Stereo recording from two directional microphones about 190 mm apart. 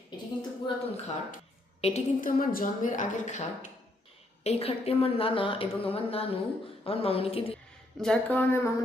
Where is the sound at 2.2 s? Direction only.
45° left (ahead or behind); by 7.6 s 30° left (ahead or behind).